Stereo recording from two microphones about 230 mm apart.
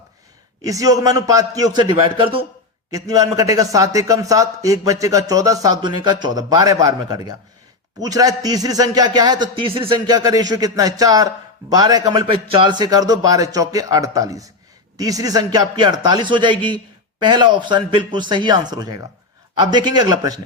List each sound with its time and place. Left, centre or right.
0.6 s a man's voice: centre